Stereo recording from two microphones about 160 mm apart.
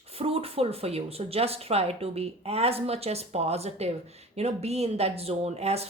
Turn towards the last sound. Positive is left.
turn(degrees=-40)  # may be behind; listen again after turning